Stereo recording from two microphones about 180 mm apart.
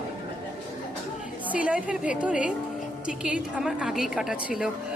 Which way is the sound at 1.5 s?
5° right (ahead or behind).